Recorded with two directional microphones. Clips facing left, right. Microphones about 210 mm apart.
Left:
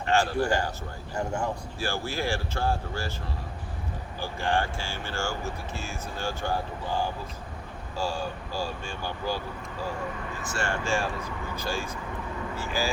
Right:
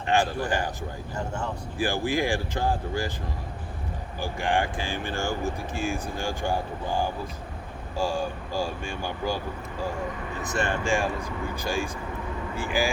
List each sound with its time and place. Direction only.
0.0 s a man's voice: 15° right (ahead or behind)
1.1 s speech: 10° left (ahead or behind)
1.8 s speech: 15° right (ahead or behind)
4.2 s speech: 15° right (ahead or behind)
7.9 s speech: 15° right (ahead or behind)
10.5 s speech: 20° right (ahead or behind)